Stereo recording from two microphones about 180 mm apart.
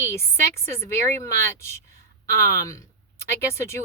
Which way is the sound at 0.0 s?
15° left (ahead or behind).